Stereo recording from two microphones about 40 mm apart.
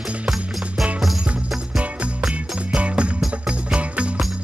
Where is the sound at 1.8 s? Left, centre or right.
Right.